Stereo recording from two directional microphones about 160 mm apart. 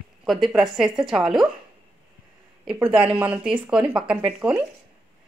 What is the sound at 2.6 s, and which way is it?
Speech, 5° right (ahead or behind).